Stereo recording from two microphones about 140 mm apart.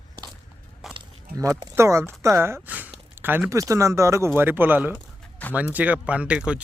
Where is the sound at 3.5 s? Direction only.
20° right (ahead or behind).